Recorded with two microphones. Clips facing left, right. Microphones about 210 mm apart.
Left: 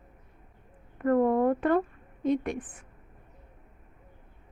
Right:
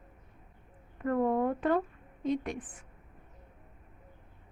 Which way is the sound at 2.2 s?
55° left (ahead or behind).